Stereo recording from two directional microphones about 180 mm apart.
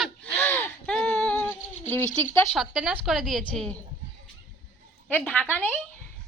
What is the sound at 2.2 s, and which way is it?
Speech, 15° left (ahead or behind).